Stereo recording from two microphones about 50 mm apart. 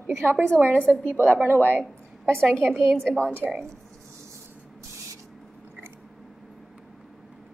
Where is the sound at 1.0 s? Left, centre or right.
Right.